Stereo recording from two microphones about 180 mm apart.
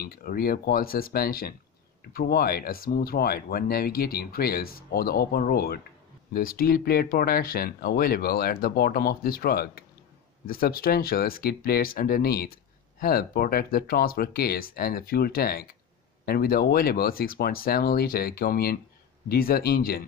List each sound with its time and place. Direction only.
0.0 s speech: 55° left (ahead or behind)